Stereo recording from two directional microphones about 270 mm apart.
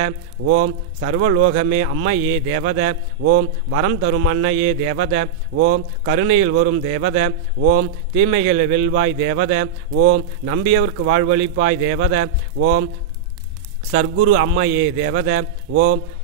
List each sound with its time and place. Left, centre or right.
0.0 s a man's voice: right
14.1 s a man's voice: right